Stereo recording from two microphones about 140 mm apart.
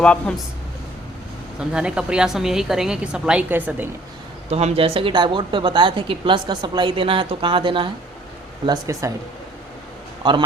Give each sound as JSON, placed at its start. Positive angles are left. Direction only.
{"t": 0.0, "sound": "speech", "side_deg": 5}
{"t": 1.5, "sound": "a woman's voice", "side_deg": -5}
{"t": 4.5, "sound": "speech", "side_deg": -45}
{"t": 8.6, "sound": "speech", "side_deg": -25}
{"t": 10.2, "sound": "speech", "side_deg": -30}